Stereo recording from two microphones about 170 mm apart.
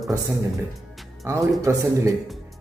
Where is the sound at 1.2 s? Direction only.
20° right (ahead or behind).